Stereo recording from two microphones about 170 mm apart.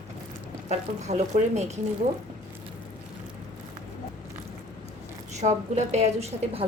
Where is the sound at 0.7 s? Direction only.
40° right (ahead or behind).